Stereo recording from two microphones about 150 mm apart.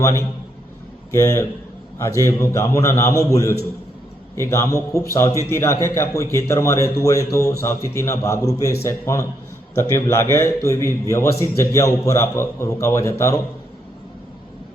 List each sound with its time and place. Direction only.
0.0 s a man's voice: 20° left (ahead or behind)